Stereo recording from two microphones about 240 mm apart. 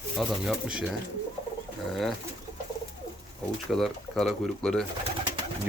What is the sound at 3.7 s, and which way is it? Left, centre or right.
Speech, centre.